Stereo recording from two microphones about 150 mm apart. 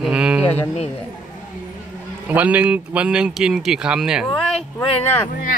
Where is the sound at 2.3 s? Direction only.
10° right (ahead or behind).